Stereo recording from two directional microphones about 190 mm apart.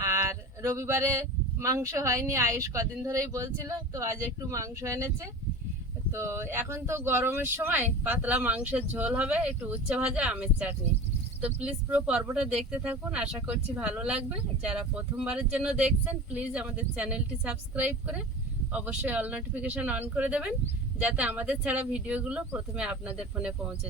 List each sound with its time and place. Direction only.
0.0 s speech: 15° right (ahead or behind)